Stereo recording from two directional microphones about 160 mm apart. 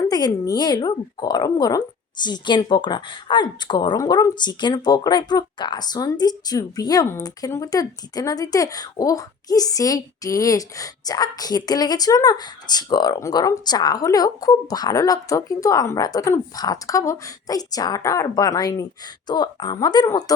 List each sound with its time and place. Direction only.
0.0 s speech: 25° left (ahead or behind)